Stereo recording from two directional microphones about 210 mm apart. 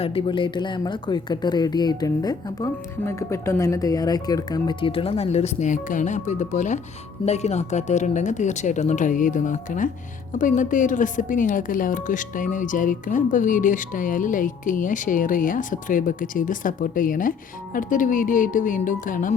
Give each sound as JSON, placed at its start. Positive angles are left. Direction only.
{"t": 0.0, "sound": "speech", "side_deg": 25}